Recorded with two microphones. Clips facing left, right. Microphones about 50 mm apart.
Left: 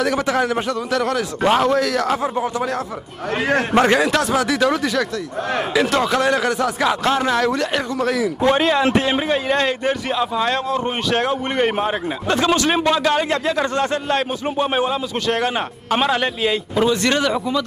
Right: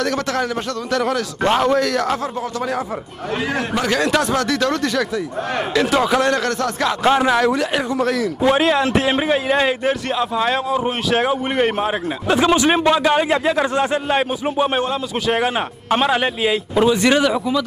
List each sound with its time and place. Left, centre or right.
0.0 s a man's voice: centre
3.4 s a man's voice: left
4.0 s a man's voice: centre
7.0 s a man's voice: centre
12.4 s speech: centre